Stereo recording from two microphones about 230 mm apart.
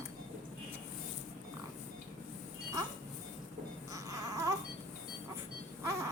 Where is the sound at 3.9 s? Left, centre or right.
Centre.